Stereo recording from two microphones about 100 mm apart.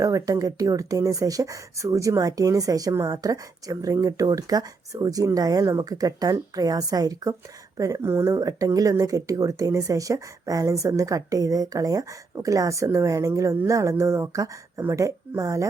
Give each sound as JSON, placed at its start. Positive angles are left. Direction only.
{"t": 0.0, "sound": "speech", "side_deg": -35}